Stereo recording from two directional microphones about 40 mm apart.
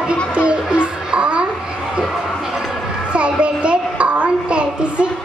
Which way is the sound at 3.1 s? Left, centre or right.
Right.